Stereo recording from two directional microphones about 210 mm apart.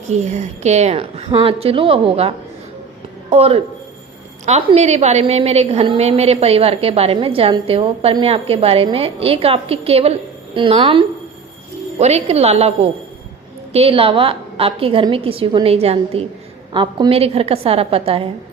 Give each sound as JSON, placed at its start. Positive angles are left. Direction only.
{"t": 0.1, "sound": "a woman's voice", "side_deg": -35}
{"t": 13.7, "sound": "a woman's voice", "side_deg": -25}